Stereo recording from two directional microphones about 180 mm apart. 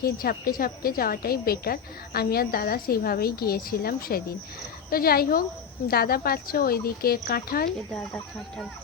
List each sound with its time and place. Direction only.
0.0 s a woman's voice: 55° left (ahead or behind)
7.9 s speech: 5° left (ahead or behind)